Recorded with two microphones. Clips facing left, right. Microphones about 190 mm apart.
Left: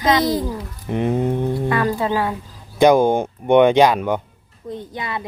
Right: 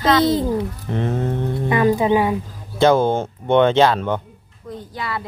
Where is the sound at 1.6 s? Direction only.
15° right (ahead or behind).